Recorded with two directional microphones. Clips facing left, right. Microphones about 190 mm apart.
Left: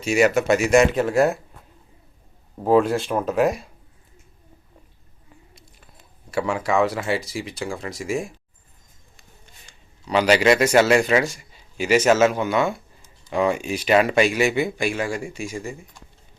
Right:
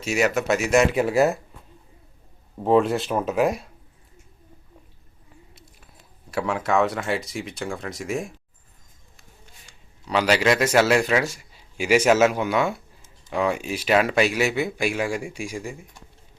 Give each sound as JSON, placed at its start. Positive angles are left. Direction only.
{"t": 0.0, "sound": "a man's voice", "side_deg": 0}
{"t": 2.6, "sound": "a man's voice", "side_deg": 0}
{"t": 6.3, "sound": "a man's voice", "side_deg": 0}
{"t": 9.6, "sound": "a man's voice", "side_deg": 0}